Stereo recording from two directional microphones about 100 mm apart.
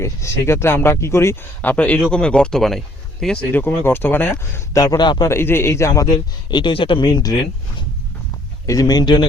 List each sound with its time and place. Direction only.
0.0 s speech: 30° left (ahead or behind); by 3.4 s 5° left (ahead or behind)
3.5 s speech: 20° left (ahead or behind)
4.9 s a man's voice: 50° left (ahead or behind)
5.3 s speech: 25° left (ahead or behind); by 7.3 s 40° left (ahead or behind)
8.6 s speech: 35° left (ahead or behind)